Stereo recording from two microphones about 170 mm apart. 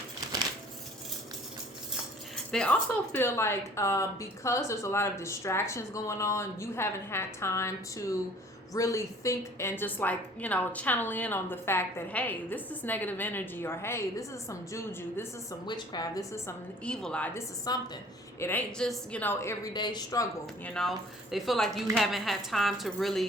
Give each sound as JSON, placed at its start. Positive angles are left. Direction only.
{"t": 2.3, "sound": "a woman's voice", "side_deg": 5}
{"t": 16.8, "sound": "a woman's voice", "side_deg": 5}
{"t": 17.7, "sound": "a woman's voice", "side_deg": 20}
{"t": 18.3, "sound": "a woman's voice", "side_deg": 10}
{"t": 20.7, "sound": "a woman's voice", "side_deg": 0}